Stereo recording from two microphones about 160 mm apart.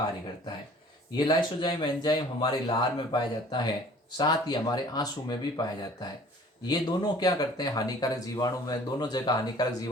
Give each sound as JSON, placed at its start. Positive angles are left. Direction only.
{"t": 1.1, "sound": "speech", "side_deg": 25}